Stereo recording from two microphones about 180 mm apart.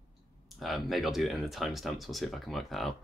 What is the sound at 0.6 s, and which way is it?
Speech, centre (ahead or behind).